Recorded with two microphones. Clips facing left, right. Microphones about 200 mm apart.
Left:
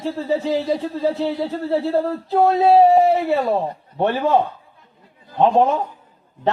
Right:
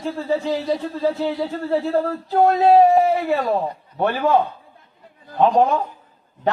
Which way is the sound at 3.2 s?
25° left (ahead or behind).